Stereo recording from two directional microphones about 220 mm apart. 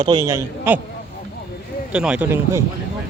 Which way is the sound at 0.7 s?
10° right (ahead or behind).